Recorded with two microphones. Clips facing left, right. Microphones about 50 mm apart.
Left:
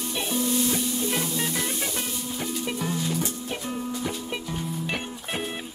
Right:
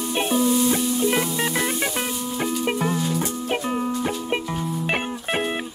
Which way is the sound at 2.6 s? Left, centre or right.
Right.